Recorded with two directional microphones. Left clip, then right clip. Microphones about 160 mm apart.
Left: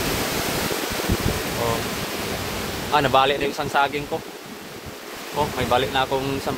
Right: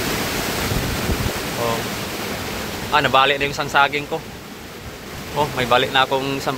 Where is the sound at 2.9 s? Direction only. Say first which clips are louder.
Right 3 dB; 35° left (ahead or behind).